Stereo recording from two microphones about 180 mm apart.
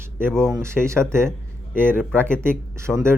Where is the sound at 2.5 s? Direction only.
5° left (ahead or behind).